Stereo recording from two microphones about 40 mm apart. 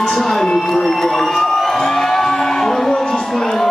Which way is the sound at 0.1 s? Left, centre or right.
Centre.